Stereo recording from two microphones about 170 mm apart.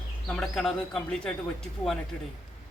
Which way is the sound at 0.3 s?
Centre (ahead or behind).